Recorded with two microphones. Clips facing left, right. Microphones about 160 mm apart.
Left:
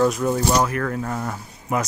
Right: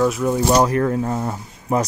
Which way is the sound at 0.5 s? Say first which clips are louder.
Right 5 dB; 30° right (ahead or behind).